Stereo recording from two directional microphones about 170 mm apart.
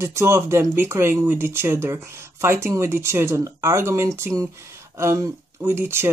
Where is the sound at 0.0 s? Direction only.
15° right (ahead or behind).